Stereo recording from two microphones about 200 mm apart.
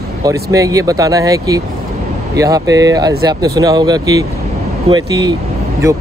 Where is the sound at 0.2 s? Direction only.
15° right (ahead or behind).